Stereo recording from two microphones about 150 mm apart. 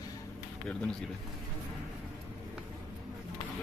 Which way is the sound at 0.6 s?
5° left (ahead or behind).